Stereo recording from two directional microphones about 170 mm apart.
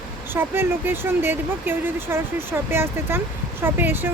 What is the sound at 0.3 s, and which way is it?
Speech, 15° right (ahead or behind).